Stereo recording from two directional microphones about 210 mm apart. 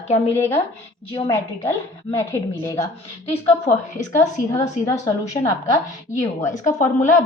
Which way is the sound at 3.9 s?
15° left (ahead or behind).